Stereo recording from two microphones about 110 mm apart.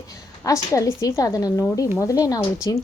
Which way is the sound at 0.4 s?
30° left (ahead or behind).